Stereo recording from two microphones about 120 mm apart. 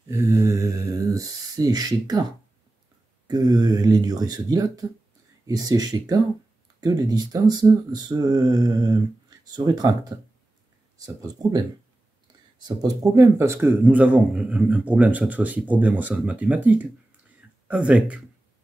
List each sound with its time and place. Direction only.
0.1 s mantra: 25° right (ahead or behind)
3.3 s speech: 35° right (ahead or behind)
11.4 s speech: 30° right (ahead or behind)
12.6 s speech: 30° right (ahead or behind); by 18.2 s 10° right (ahead or behind)